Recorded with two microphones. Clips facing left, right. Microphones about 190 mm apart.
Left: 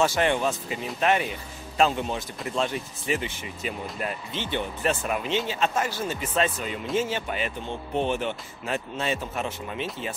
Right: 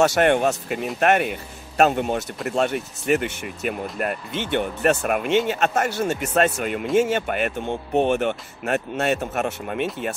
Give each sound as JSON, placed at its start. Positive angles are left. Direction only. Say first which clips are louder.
{"t": 0.0, "sound": "speech", "louder": "right 5 dB", "side_deg": -65}